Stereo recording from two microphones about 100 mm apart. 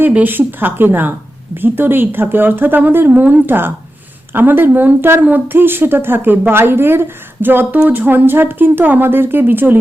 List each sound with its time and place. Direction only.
0.0 s speech: 20° right (ahead or behind)